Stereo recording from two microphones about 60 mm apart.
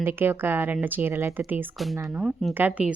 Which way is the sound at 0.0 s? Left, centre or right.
Right.